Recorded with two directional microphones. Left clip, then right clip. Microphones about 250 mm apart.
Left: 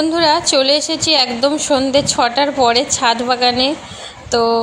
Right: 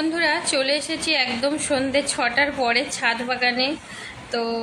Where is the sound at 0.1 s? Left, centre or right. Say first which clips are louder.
Left 9 dB; left.